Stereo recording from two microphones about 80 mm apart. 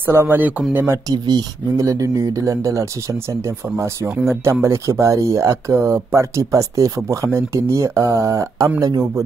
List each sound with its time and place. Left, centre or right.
0.0 s speech: right
1.0 s speech: right
1.8 s speech: right